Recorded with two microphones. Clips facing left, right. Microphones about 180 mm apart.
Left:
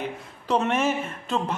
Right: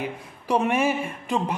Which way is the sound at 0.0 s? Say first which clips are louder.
Right 1 dB; 10° right (ahead or behind).